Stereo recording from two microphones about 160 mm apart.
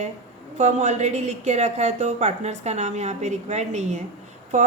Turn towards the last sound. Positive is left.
turn(degrees=-50)  # may be behind; listen again after turning